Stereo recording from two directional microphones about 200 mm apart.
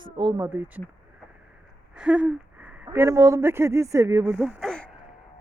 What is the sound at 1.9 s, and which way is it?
Speech, 5° right (ahead or behind).